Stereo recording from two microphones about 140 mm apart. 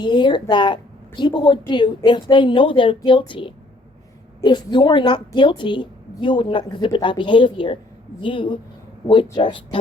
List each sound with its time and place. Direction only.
0.0 s a woman's voice: 35° left (ahead or behind)